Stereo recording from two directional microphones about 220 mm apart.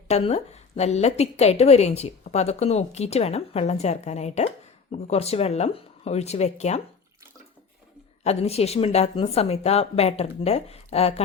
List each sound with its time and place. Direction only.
0.1 s a woman's voice: 30° left (ahead or behind)
8.2 s a woman's voice: 30° left (ahead or behind)